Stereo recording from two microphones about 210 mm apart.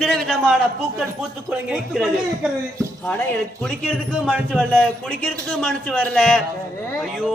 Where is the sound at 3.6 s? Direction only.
5° left (ahead or behind).